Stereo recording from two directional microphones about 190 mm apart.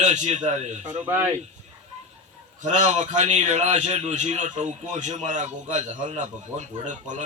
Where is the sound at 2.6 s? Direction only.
40° right (ahead or behind).